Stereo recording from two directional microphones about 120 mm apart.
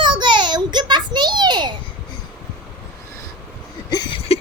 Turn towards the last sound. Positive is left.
turn(degrees=35)  # may be behind; listen again after turning